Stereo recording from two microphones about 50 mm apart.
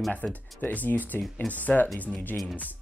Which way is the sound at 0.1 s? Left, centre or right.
Left.